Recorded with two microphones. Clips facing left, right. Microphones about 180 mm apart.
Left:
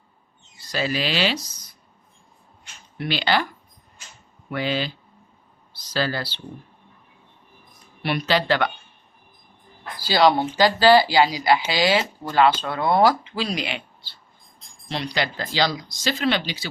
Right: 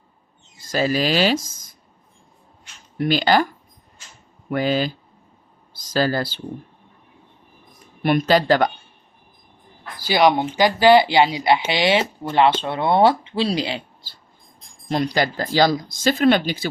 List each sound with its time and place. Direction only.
0.6 s speech: 45° right (ahead or behind)
3.0 s speech: 45° right (ahead or behind)
8.0 s speech: 45° right (ahead or behind)
10.0 s speech: 20° right (ahead or behind)
14.8 s speech: 45° right (ahead or behind)